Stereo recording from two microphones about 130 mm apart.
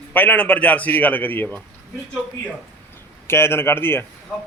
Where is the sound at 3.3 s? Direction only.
20° left (ahead or behind).